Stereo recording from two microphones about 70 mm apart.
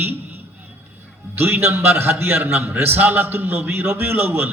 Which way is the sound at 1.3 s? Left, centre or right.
Right.